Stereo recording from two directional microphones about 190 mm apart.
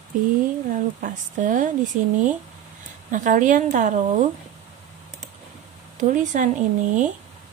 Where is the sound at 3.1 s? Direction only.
40° right (ahead or behind).